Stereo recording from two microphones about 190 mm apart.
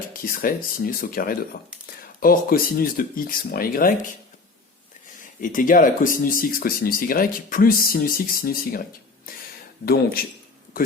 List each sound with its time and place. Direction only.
0.1 s speech: 50° left (ahead or behind)
5.4 s speech: 45° left (ahead or behind)